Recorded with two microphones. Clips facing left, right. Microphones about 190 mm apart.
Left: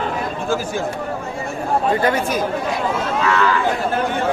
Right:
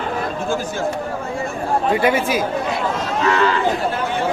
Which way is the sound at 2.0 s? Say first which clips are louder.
Right 1 dB; 10° right (ahead or behind).